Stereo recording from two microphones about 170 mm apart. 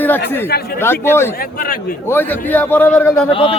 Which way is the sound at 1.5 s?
55° left (ahead or behind).